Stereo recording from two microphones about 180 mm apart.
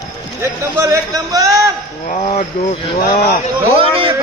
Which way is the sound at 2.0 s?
35° left (ahead or behind).